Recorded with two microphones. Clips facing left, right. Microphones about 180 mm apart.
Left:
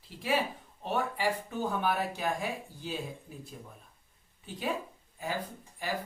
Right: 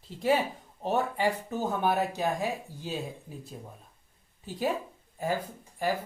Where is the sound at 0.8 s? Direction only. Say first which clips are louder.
Right 5 dB; 40° right (ahead or behind).